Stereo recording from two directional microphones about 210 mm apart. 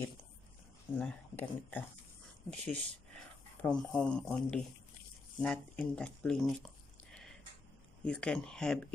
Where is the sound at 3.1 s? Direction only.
5° left (ahead or behind).